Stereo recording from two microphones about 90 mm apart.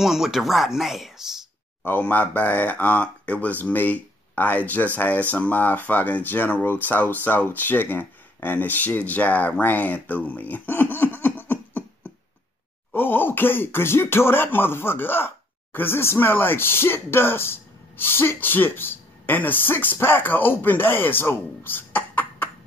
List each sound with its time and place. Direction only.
0.0 s speech: 5° right (ahead or behind)
1.9 s speech: 20° left (ahead or behind)